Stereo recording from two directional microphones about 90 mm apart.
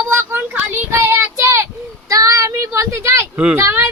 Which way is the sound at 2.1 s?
40° right (ahead or behind).